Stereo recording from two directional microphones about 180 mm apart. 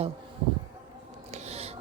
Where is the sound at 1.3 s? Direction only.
40° right (ahead or behind).